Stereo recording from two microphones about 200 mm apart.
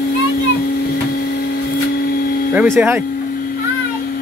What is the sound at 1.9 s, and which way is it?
Printer, 50° left (ahead or behind).